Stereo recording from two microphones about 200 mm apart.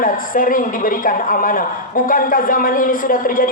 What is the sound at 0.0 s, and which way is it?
A woman's voice, 45° left (ahead or behind).